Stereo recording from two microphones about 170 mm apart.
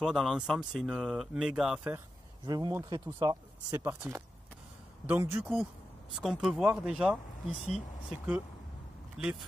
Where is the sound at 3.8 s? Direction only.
15° right (ahead or behind).